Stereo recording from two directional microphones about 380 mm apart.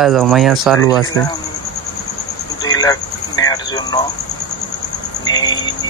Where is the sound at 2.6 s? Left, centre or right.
Centre.